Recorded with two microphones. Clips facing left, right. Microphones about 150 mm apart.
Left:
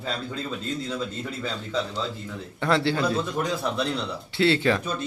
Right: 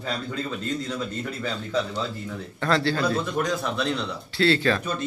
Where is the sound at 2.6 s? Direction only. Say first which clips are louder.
Even; 20° left (ahead or behind).